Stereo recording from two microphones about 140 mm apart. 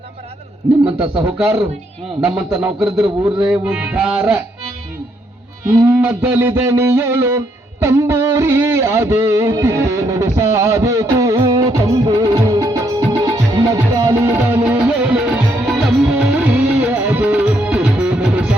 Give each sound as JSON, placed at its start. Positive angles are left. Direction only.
{"t": 1.4, "sound": "music", "side_deg": -5}
{"t": 2.2, "sound": "a man's voice", "side_deg": -5}
{"t": 3.4, "sound": "music", "side_deg": -5}
{"t": 6.0, "sound": "music", "side_deg": -10}